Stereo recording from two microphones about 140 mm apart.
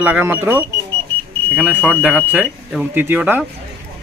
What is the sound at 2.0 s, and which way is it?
Speech, 10° right (ahead or behind).